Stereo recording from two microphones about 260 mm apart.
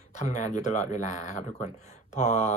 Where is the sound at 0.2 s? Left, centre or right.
Left.